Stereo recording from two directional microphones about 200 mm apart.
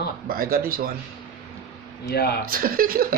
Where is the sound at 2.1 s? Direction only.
50° left (ahead or behind).